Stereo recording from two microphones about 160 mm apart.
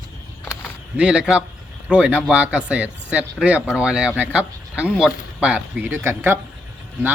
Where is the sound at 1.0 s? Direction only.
5° right (ahead or behind).